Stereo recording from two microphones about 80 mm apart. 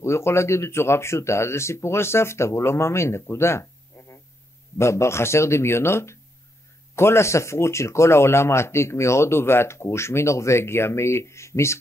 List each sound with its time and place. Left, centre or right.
0.0 s speech: left